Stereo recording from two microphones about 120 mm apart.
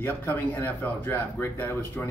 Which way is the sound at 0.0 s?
15° left (ahead or behind).